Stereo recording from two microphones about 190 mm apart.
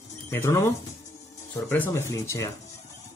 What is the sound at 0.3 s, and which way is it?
Speech, 15° left (ahead or behind).